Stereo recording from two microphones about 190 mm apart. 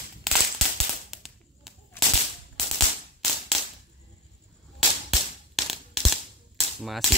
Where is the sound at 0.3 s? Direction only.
Centre (ahead or behind).